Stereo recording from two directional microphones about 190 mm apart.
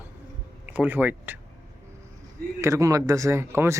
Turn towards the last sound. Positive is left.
turn(degrees=-15)  # may be behind; listen again after turning